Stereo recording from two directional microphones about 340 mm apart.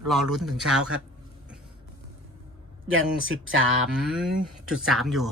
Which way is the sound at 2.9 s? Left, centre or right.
Right.